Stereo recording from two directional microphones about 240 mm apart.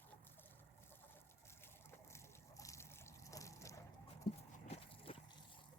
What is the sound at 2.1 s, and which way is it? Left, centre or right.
Water, centre.